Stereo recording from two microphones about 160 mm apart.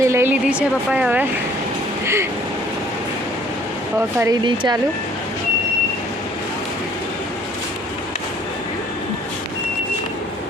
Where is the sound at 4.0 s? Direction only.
20° right (ahead or behind).